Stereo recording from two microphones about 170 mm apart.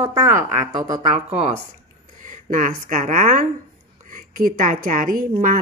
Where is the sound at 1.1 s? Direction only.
45° right (ahead or behind).